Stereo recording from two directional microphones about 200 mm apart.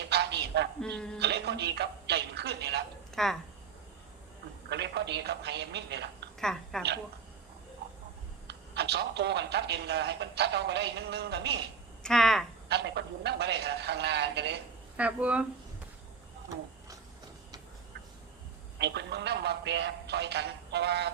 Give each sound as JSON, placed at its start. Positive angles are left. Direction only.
{"t": 0.1, "sound": "a sound", "side_deg": -55}
{"t": 0.8, "sound": "a woman's voice", "side_deg": 5}
{"t": 1.2, "sound": "speech", "side_deg": -55}
{"t": 3.2, "sound": "a woman's voice", "side_deg": 0}
{"t": 4.7, "sound": "a man's voice", "side_deg": -60}
{"t": 6.4, "sound": "a woman's voice", "side_deg": 0}
{"t": 8.4, "sound": "a man's voice", "side_deg": -55}
{"t": 12.0, "sound": "a woman's voice", "side_deg": 0}
{"t": 12.6, "sound": "a man's voice", "side_deg": -55}
{"t": 14.9, "sound": "speech", "side_deg": -5}
{"t": 18.8, "sound": "a man's voice", "side_deg": -60}